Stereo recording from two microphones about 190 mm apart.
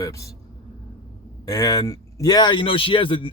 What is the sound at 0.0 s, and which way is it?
Speech, 15° left (ahead or behind).